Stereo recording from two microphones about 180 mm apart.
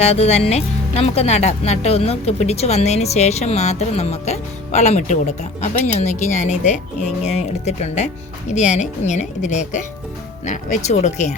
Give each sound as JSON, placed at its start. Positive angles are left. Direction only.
{"t": 0.0, "sound": "speech", "side_deg": 35}